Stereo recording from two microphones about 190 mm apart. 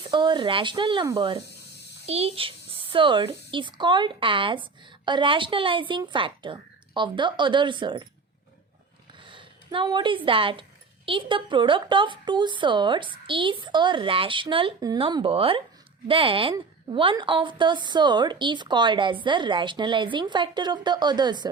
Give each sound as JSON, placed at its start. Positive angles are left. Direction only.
{"t": 0.0, "sound": "a child's voice", "side_deg": -25}
{"t": 9.2, "sound": "a sound", "side_deg": -25}
{"t": 10.2, "sound": "a child's voice", "side_deg": -25}